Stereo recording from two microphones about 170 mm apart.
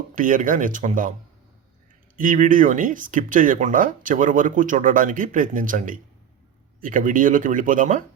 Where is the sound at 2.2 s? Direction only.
50° right (ahead or behind).